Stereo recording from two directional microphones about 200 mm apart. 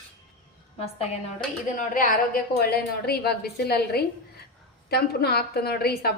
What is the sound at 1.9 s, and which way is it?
A woman's voice, 45° left (ahead or behind).